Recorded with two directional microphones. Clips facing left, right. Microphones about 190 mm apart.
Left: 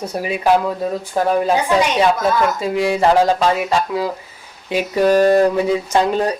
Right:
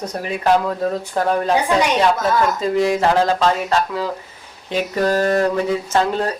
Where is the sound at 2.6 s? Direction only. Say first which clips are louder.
Even; 10° left (ahead or behind).